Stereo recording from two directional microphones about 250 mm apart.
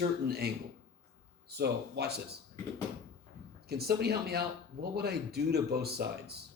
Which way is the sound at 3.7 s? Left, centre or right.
Right.